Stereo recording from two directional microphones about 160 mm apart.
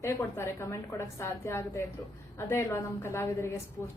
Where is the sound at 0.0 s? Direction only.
15° left (ahead or behind).